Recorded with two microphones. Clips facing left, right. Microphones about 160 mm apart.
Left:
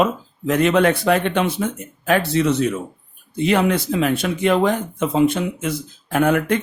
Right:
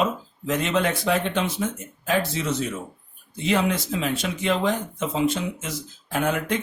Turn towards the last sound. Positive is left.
turn(degrees=55)  # may be behind; listen again after turning